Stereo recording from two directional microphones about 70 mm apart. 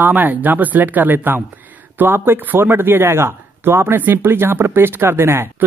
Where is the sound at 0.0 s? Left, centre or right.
Right.